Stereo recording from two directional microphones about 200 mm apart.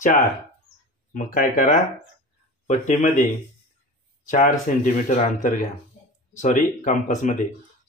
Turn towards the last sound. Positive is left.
turn(degrees=40)  # may be behind; listen again after turning